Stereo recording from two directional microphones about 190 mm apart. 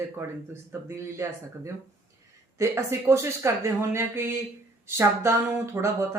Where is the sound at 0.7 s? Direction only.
15° right (ahead or behind).